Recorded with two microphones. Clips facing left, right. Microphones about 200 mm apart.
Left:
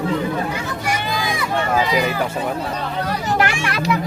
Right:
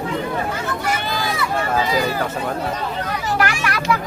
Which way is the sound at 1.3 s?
15° left (ahead or behind).